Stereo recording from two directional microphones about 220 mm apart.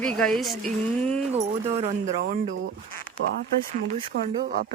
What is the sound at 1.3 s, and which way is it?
Speech, 30° right (ahead or behind).